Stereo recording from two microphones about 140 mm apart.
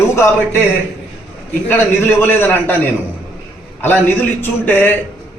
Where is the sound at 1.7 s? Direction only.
15° left (ahead or behind).